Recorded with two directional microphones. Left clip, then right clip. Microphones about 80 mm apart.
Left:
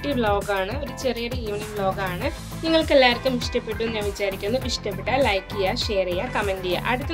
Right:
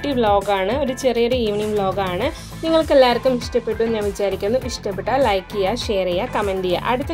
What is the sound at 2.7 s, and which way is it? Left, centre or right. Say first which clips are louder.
Speech: right 3 dB; right.